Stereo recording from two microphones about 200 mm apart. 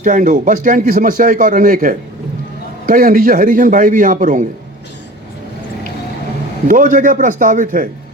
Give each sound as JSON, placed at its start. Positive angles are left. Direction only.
{"t": 0.0, "sound": "a man's voice", "side_deg": -40}
{"t": 6.7, "sound": "a man's voice", "side_deg": -40}